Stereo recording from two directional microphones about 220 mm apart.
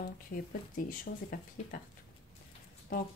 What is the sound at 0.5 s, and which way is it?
Speech, 40° left (ahead or behind).